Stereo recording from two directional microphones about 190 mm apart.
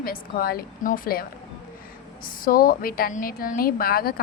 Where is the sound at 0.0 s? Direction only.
50° left (ahead or behind).